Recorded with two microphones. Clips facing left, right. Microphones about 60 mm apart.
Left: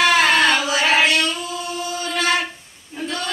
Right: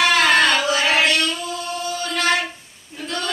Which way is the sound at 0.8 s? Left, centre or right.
Centre.